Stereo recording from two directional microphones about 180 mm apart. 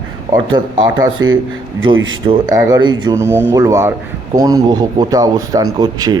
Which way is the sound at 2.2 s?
30° right (ahead or behind).